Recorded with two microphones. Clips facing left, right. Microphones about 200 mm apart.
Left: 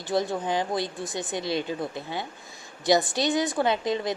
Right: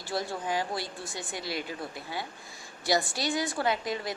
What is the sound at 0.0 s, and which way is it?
Speech, 20° left (ahead or behind).